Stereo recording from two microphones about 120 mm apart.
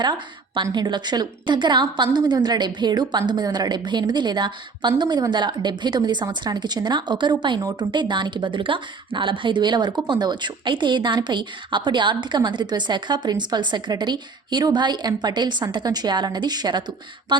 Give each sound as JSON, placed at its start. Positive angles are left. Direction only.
{"t": 0.0, "sound": "a woman's voice", "side_deg": -40}